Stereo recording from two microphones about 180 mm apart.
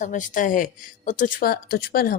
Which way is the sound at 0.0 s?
45° left (ahead or behind).